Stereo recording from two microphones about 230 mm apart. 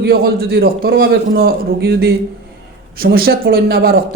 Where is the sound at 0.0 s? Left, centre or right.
Right.